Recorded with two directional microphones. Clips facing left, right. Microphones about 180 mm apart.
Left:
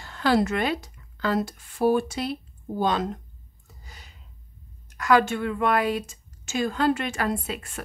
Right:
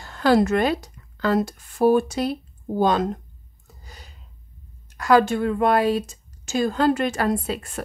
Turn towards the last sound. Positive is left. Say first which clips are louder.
# right 5 dB
turn(degrees=-35)  # may be behind; listen again after turning